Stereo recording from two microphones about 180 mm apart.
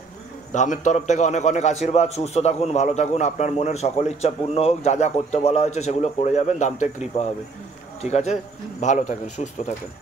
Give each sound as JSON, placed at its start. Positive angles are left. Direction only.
{"t": 0.5, "sound": "a man's voice", "side_deg": 45}